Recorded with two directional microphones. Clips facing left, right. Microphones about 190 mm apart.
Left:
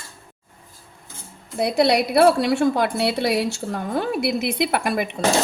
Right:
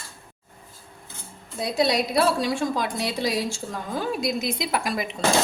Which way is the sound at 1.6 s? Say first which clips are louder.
Left 5 dB; 65° left (ahead or behind).